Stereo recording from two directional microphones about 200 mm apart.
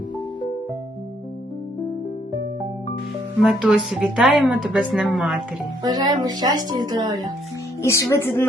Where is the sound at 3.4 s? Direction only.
5° right (ahead or behind).